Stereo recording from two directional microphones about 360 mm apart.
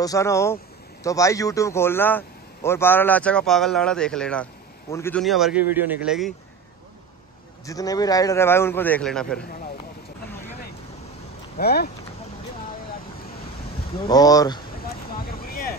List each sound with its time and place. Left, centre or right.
0.0 s a man's voice: centre
7.6 s a man's voice: centre
11.5 s speech: left
14.0 s a man's voice: centre
15.2 s vehicle: left